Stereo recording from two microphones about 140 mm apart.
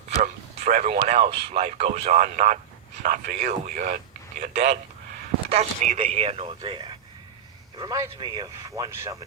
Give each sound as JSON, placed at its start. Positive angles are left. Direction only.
{"t": 0.2, "sound": "a man's voice", "side_deg": -60}
{"t": 6.1, "sound": "speech", "side_deg": -45}
{"t": 7.8, "sound": "speech", "side_deg": -25}